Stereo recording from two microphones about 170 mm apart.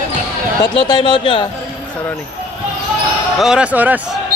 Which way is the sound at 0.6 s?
25° left (ahead or behind).